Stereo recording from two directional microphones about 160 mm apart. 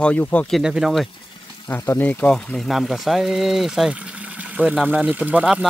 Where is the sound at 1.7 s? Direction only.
15° left (ahead or behind).